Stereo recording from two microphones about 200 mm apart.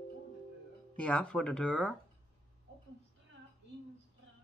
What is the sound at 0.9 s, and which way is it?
A man's voice, 5° left (ahead or behind).